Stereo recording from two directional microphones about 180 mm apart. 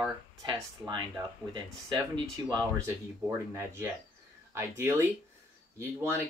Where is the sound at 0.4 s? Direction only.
20° right (ahead or behind).